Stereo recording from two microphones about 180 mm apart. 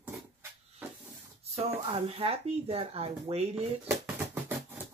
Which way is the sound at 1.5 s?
35° right (ahead or behind).